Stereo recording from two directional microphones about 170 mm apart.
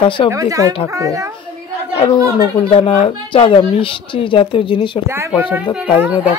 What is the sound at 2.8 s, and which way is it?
Speech, 30° left (ahead or behind).